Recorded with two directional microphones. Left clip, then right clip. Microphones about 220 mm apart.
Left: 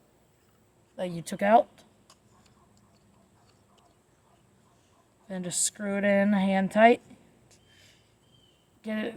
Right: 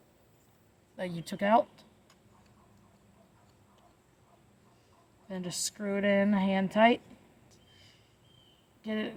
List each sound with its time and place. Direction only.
0.9 s speech: 30° left (ahead or behind)
5.3 s speech: 35° left (ahead or behind)
8.8 s speech: 35° left (ahead or behind)